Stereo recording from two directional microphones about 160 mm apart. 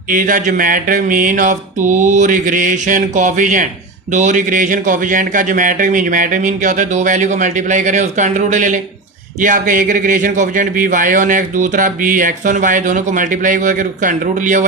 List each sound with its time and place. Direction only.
0.1 s a man's voice: 55° right (ahead or behind)